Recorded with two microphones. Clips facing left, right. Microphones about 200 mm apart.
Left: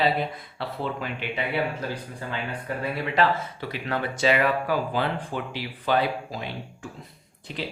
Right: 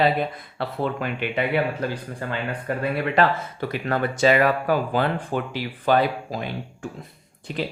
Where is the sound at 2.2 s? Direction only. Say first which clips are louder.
Right 6 dB; 60° right (ahead or behind).